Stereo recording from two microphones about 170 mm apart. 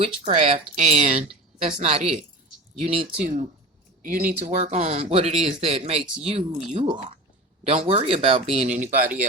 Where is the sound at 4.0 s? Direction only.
50° right (ahead or behind).